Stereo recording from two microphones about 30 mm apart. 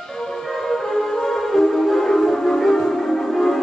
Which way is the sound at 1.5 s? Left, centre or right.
Centre.